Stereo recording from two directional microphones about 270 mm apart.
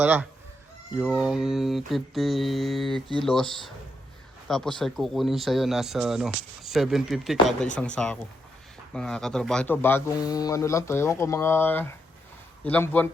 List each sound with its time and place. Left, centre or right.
0.0 s mantra: centre
4.4 s speech: centre
4.8 s mantra: centre
8.9 s a man's voice: centre
12.6 s mantra: centre